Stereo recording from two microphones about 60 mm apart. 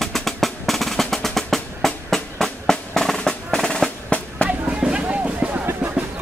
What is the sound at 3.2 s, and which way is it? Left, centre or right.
Percussion, centre.